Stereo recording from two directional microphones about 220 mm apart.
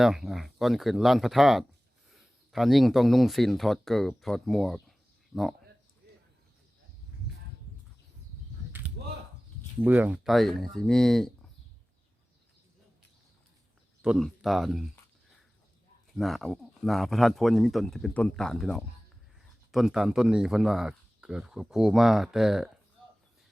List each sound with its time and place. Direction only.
0.0 s speech: centre (ahead or behind)
6.0 s bird: 45° right (ahead or behind)
9.8 s speech: 5° right (ahead or behind)
14.0 s speech: centre (ahead or behind)
16.1 s speech: centre (ahead or behind)